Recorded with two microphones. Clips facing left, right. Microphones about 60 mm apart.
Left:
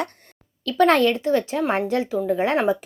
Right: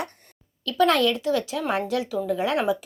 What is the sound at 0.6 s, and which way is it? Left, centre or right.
Speech, left.